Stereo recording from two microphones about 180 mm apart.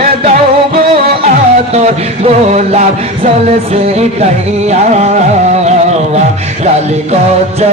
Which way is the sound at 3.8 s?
35° right (ahead or behind).